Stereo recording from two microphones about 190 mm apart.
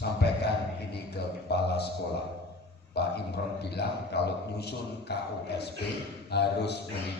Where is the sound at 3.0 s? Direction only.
60° left (ahead or behind).